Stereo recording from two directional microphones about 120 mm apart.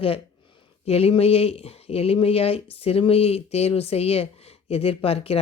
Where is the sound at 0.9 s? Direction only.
55° left (ahead or behind).